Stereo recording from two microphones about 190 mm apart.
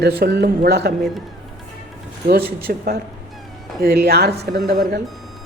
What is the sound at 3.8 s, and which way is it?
A woman's voice, 55° right (ahead or behind).